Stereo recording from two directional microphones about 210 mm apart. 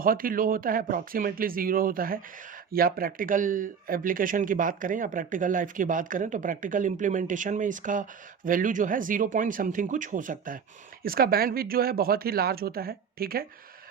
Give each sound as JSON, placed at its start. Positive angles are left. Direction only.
{"t": 0.0, "sound": "speech", "side_deg": -40}